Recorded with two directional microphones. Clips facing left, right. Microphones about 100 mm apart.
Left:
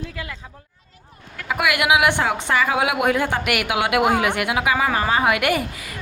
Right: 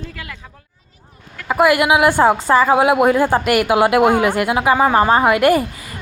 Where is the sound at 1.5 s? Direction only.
35° right (ahead or behind).